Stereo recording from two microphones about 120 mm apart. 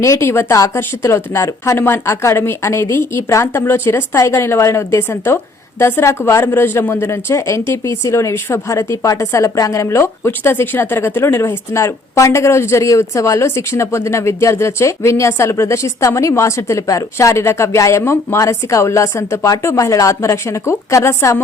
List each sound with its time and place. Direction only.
0.0 s speech: 25° left (ahead or behind)